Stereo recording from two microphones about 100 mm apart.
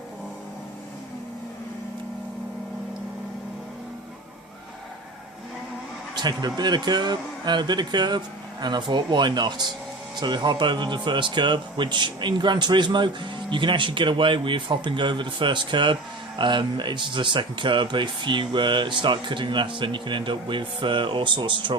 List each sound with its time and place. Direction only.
6.1 s speech: 45° right (ahead or behind)